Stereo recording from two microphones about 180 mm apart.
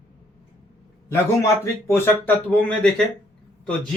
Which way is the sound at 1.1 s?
15° left (ahead or behind).